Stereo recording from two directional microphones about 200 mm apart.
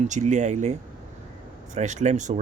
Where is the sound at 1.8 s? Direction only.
35° right (ahead or behind).